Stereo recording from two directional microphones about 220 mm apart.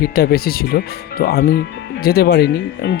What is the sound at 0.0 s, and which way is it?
Speech, 45° left (ahead or behind).